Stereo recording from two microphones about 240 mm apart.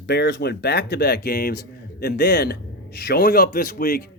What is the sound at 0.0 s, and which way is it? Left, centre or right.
Speech, left.